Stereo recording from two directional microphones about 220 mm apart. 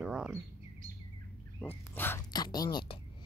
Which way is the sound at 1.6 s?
10° left (ahead or behind).